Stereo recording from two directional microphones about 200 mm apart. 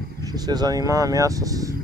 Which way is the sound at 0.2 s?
20° right (ahead or behind).